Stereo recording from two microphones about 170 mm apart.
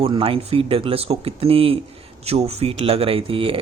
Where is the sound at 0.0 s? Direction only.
35° right (ahead or behind).